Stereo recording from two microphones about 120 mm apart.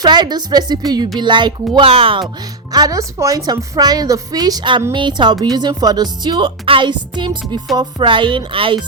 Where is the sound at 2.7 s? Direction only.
30° right (ahead or behind).